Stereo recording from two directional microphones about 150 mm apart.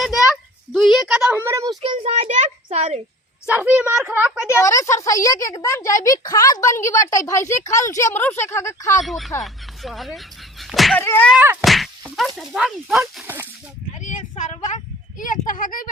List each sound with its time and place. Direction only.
0.0 s a sound: centre (ahead or behind)
0.7 s speech: centre (ahead or behind)
1.1 s a child's voice: 15° right (ahead or behind)
1.8 s a child's voice: 40° right (ahead or behind)
3.4 s speech: 10° right (ahead or behind)
4.4 s speech: 20° left (ahead or behind)
9.0 s speech: centre (ahead or behind)
10.9 s a sound: 15° left (ahead or behind)
11.3 s speech: 10° right (ahead or behind)
11.6 s whack: centre (ahead or behind)
12.4 s speech: centre (ahead or behind)
13.2 s speech: 15° right (ahead or behind)
14.1 s a sound: 55° left (ahead or behind)
15.2 s a child's voice: 60° left (ahead or behind)